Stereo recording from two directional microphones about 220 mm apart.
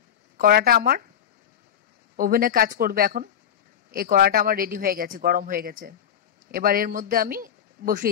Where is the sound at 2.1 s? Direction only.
40° right (ahead or behind).